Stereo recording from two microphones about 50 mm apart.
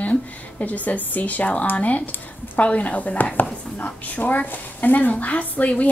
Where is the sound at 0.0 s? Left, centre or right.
Left.